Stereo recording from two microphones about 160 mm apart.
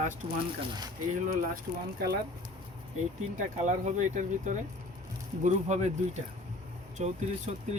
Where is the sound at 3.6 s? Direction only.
50° right (ahead or behind).